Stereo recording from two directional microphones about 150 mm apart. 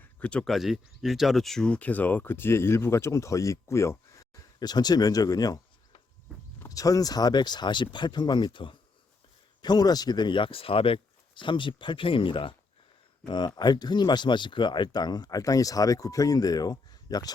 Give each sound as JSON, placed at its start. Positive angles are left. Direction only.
{"t": 0.2, "sound": "speech", "side_deg": 5}